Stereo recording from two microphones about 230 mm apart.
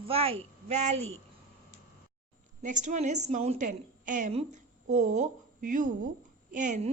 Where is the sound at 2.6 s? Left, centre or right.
Right.